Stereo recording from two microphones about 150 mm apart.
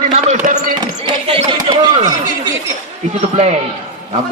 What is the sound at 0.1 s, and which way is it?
Basketball bounce, 50° right (ahead or behind).